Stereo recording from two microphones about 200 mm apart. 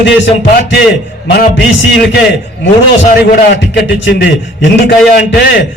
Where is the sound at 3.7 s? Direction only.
60° left (ahead or behind).